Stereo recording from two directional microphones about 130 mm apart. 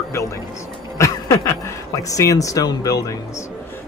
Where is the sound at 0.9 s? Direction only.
25° left (ahead or behind).